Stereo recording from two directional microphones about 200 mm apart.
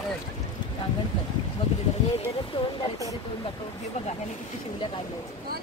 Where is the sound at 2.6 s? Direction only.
25° left (ahead or behind).